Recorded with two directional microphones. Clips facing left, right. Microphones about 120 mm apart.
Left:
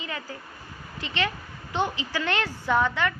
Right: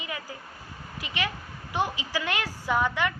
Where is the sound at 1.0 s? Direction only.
10° right (ahead or behind).